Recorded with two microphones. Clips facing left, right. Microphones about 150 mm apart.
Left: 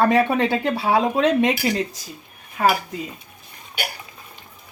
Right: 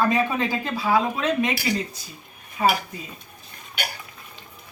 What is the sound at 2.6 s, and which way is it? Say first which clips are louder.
Speech: left 2 dB; 70° left (ahead or behind).